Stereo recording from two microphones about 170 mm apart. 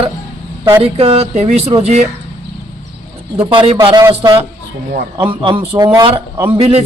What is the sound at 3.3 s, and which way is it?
Speech, 30° right (ahead or behind).